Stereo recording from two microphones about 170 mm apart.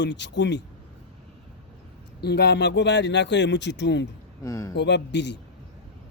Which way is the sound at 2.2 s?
75° left (ahead or behind).